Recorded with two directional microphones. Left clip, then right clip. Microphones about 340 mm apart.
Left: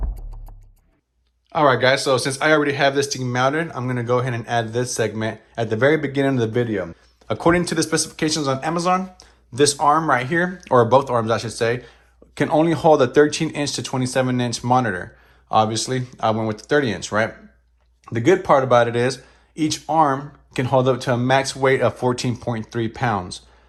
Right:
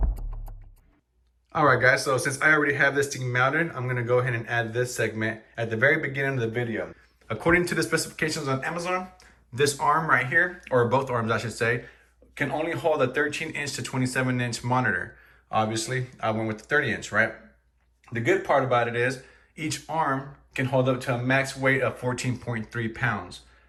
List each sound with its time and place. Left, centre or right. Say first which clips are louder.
1.5 s speech: left 4 dB; centre
12.5 s speech: left 10 dB; centre